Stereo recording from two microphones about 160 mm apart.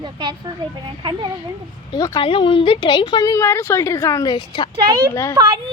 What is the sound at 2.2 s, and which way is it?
A woman's voice, 35° left (ahead or behind).